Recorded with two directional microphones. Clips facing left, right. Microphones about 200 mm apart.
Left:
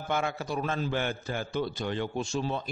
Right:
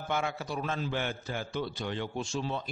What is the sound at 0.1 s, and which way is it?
A man's voice, 50° left (ahead or behind).